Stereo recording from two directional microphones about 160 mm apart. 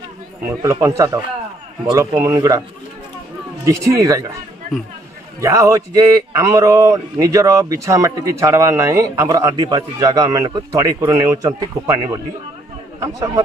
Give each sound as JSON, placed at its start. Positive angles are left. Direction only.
{"t": 0.6, "sound": "speech", "side_deg": -20}
{"t": 3.6, "sound": "speech", "side_deg": -20}
{"t": 5.4, "sound": "speech", "side_deg": -20}